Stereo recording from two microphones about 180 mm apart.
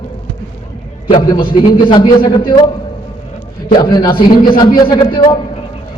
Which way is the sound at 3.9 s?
25° left (ahead or behind).